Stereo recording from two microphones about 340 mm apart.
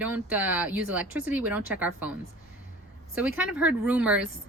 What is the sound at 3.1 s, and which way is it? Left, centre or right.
Speech, centre.